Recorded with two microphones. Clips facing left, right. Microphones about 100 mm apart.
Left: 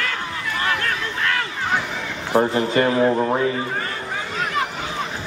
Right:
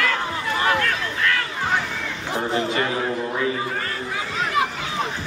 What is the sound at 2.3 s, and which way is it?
Speech, 35° left (ahead or behind).